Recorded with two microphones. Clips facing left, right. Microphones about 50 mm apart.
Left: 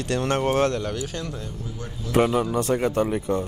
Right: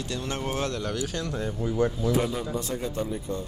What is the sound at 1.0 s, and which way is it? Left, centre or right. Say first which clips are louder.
Speech: even; left.